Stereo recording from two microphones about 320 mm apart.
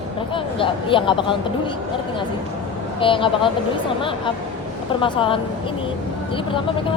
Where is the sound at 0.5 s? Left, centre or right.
Centre.